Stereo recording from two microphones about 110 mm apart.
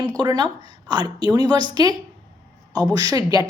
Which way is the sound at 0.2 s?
40° right (ahead or behind).